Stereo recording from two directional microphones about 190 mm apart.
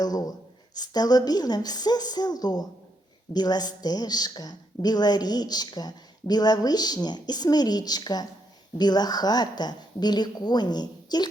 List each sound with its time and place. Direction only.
0.0 s a woman's voice: 20° left (ahead or behind)